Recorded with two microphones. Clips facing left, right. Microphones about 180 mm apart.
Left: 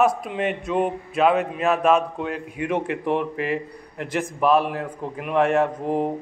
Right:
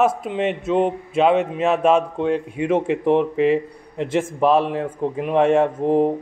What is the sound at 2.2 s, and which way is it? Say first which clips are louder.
Speech: right 8 dB; 5° left (ahead or behind).